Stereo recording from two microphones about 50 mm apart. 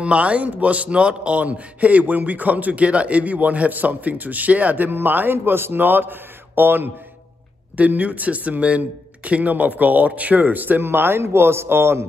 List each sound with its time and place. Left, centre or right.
0.0 s speech: right
7.7 s speech: right
10.9 s speech: right